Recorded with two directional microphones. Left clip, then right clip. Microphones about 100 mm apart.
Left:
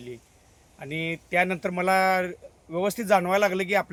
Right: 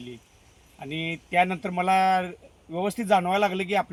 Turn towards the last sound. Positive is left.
turn(degrees=30)  # may be behind; listen again after turning